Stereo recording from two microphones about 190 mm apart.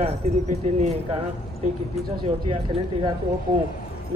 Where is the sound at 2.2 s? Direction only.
30° right (ahead or behind).